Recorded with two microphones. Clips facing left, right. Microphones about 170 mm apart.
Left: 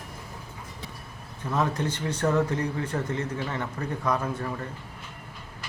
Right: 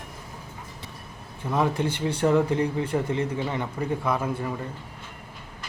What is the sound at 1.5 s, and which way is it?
Speech, 10° right (ahead or behind).